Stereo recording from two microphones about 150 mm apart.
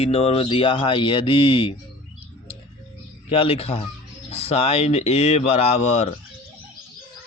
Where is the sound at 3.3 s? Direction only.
40° left (ahead or behind).